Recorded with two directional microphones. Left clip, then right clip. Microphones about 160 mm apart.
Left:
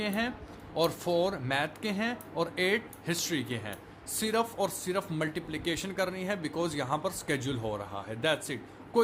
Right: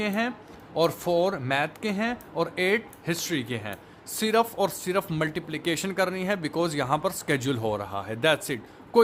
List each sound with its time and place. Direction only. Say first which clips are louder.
0.0 s speech: right 5 dB; 30° right (ahead or behind)